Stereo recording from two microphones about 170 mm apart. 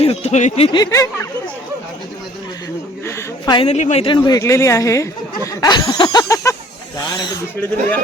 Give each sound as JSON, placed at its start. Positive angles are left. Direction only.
{"t": 0.0, "sound": "speech", "side_deg": 40}
{"t": 0.8, "sound": "speech", "side_deg": 20}
{"t": 3.1, "sound": "a sound", "side_deg": 20}
{"t": 3.7, "sound": "speech", "side_deg": 40}
{"t": 4.0, "sound": "speech", "side_deg": 25}
{"t": 5.5, "sound": "snicker", "side_deg": 20}